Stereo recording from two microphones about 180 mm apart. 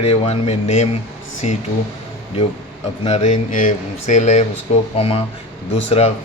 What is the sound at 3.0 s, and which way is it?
A man's voice, 35° left (ahead or behind).